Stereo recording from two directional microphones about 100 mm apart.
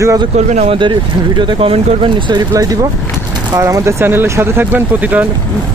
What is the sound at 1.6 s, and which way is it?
Speech, 75° right (ahead or behind).